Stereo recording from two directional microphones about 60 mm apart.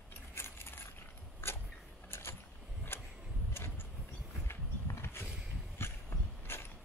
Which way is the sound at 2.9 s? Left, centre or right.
Left.